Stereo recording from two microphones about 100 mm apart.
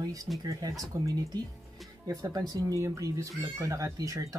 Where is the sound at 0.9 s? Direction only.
35° right (ahead or behind).